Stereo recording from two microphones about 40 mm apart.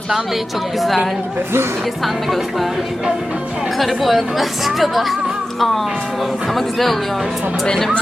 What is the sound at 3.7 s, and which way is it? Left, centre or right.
Speech, centre.